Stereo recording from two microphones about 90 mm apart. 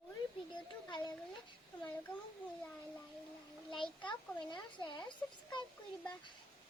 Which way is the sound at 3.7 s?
65° left (ahead or behind).